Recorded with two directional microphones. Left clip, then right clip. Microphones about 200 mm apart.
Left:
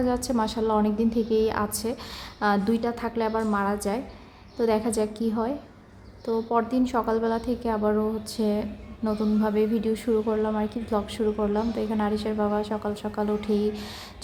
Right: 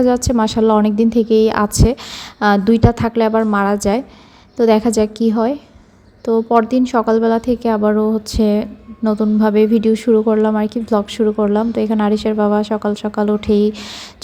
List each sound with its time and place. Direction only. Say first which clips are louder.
0.0 s a woman's voice: right 11 dB; 35° right (ahead or behind)